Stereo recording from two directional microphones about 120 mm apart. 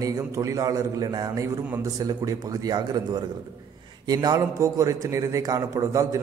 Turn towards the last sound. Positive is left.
turn(degrees=-25)  # may be behind; listen again after turning